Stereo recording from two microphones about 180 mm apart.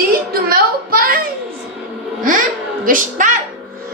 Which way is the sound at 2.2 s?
50° right (ahead or behind).